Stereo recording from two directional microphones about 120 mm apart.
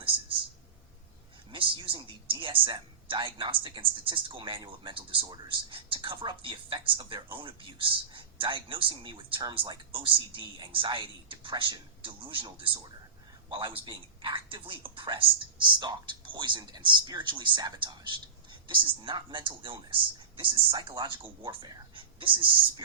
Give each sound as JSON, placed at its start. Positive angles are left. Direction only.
{"t": 1.5, "sound": "a man's voice", "side_deg": -45}